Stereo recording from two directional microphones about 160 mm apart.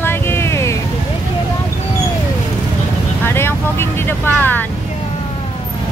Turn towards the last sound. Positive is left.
turn(degrees=10)  # may be behind; listen again after turning